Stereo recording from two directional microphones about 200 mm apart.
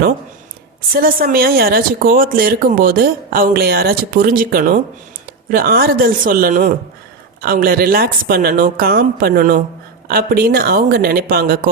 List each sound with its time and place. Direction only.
1.0 s speech: 45° right (ahead or behind)